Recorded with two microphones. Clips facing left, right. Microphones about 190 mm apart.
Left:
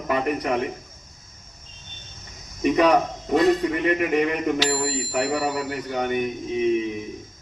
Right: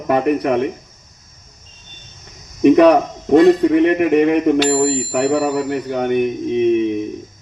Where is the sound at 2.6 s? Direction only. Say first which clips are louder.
Right 8 dB; 60° right (ahead or behind).